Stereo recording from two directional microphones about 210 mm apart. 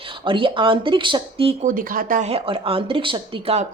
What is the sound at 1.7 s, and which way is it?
A woman's voice, 40° right (ahead or behind).